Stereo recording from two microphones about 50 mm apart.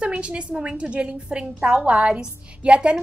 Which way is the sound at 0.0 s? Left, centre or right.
Right.